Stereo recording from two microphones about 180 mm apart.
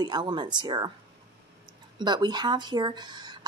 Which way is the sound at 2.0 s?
25° right (ahead or behind).